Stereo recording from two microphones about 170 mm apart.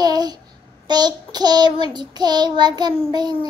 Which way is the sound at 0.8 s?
25° right (ahead or behind).